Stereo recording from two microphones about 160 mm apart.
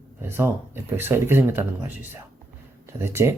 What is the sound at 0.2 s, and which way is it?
Speech, 15° right (ahead or behind).